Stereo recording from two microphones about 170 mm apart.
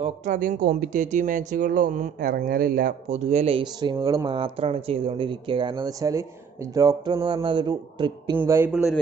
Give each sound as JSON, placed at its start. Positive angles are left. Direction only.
{"t": 0.0, "sound": "speech", "side_deg": -45}
{"t": 2.1, "sound": "speech", "side_deg": -60}
{"t": 3.1, "sound": "speech", "side_deg": -40}
{"t": 8.4, "sound": "speech", "side_deg": -15}